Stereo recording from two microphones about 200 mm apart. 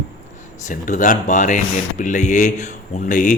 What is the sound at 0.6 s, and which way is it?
A man's voice, 40° left (ahead or behind).